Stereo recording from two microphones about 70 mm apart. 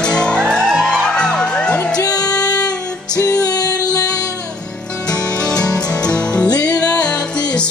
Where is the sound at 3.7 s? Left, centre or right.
Right.